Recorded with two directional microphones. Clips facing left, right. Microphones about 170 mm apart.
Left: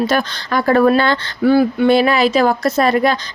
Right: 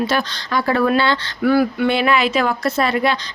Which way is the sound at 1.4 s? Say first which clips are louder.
Left 3 dB; 25° left (ahead or behind).